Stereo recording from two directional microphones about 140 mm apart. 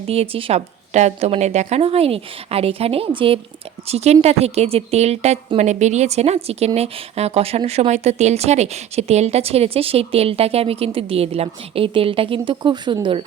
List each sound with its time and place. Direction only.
0.1 s a woman's voice: 45° right (ahead or behind)